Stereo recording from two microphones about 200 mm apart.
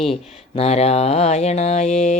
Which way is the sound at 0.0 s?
30° left (ahead or behind).